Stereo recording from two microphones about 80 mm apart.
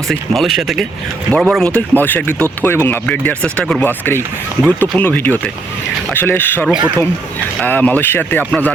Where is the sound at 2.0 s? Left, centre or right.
Left.